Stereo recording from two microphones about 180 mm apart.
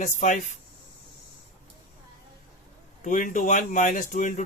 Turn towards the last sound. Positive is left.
turn(degrees=45)  # may be behind; listen again after turning